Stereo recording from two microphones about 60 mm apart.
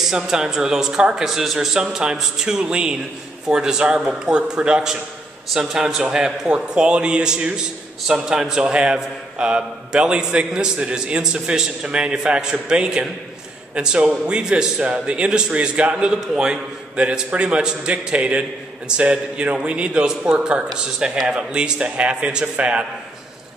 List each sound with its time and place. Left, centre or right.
0.0 s a man's voice: centre